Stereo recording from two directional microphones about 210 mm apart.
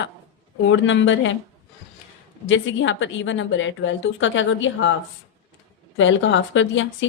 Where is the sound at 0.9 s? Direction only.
65° left (ahead or behind).